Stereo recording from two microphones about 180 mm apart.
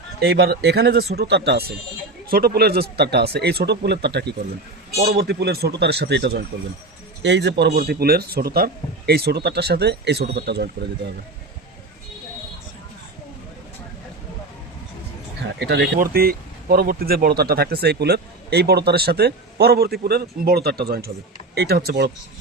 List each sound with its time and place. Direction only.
0.2 s speech: 65° right (ahead or behind)
15.5 s speech: 70° right (ahead or behind)